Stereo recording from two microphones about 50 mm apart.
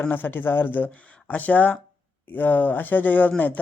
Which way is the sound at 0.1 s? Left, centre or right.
Left.